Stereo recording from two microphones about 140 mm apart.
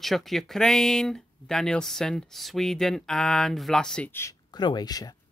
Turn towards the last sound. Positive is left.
turn(degrees=25)  # may be behind; listen again after turning